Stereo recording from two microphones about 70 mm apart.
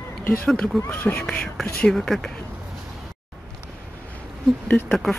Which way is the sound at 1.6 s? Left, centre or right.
Centre.